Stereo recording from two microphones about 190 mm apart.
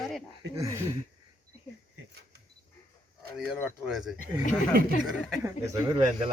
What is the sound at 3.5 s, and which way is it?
Speech, centre (ahead or behind).